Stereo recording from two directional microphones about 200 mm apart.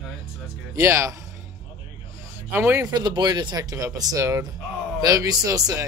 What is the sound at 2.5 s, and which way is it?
Speech, 10° right (ahead or behind).